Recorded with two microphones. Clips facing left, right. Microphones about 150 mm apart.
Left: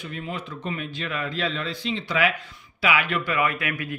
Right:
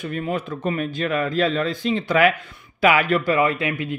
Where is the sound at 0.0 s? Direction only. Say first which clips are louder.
Right 7 dB; 50° right (ahead or behind).